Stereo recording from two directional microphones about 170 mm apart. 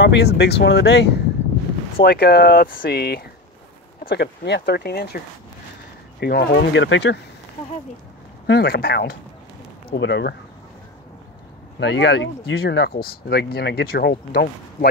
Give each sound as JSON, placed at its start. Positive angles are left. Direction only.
{"t": 0.0, "sound": "speech", "side_deg": 85}
{"t": 2.0, "sound": "speech", "side_deg": 70}
{"t": 8.5, "sound": "speech", "side_deg": 70}
{"t": 9.9, "sound": "speech", "side_deg": 90}
{"t": 11.8, "sound": "speech", "side_deg": 90}